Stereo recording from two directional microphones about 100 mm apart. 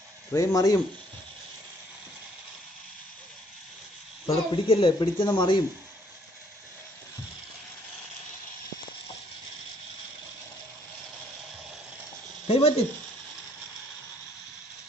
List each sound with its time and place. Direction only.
0.3 s speech: 35° left (ahead or behind)
4.3 s speech: 65° left (ahead or behind)
12.4 s a sound: 90° left